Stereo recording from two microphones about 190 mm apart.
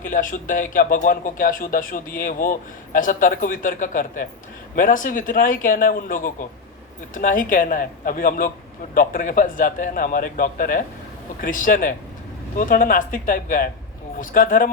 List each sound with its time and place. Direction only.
0.0 s speech: 45° left (ahead or behind)